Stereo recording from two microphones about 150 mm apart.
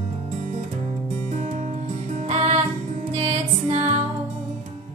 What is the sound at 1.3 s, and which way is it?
Music, 55° right (ahead or behind).